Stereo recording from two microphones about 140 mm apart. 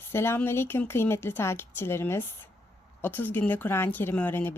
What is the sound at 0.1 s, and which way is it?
A woman's voice, 15° left (ahead or behind).